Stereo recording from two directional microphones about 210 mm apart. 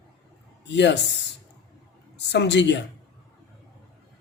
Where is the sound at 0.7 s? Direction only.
55° left (ahead or behind).